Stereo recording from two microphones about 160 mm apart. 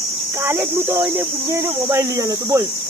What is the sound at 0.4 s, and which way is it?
Speech, 15° right (ahead or behind).